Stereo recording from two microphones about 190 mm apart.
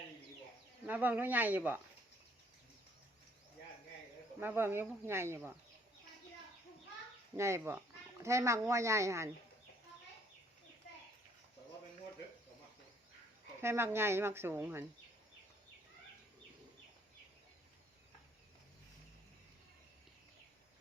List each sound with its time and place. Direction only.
0.9 s speech: 10° right (ahead or behind)
4.4 s speech: 10° right (ahead or behind)
7.3 s speech: 15° right (ahead or behind)
13.6 s speech: 15° right (ahead or behind)